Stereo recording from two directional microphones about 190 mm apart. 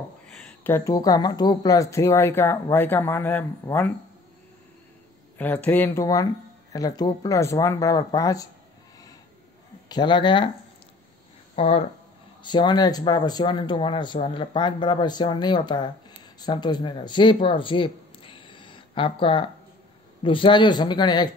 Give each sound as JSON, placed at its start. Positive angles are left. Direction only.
{"t": 0.5, "sound": "speech", "side_deg": 10}
{"t": 5.4, "sound": "speech", "side_deg": 10}
{"t": 9.8, "sound": "speech", "side_deg": 25}
{"t": 11.5, "sound": "speech", "side_deg": 30}